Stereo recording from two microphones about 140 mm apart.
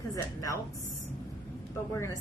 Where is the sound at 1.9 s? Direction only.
20° left (ahead or behind).